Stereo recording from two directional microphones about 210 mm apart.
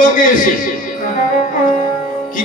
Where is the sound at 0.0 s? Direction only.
40° left (ahead or behind).